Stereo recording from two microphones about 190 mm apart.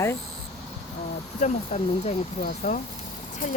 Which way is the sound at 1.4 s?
40° left (ahead or behind).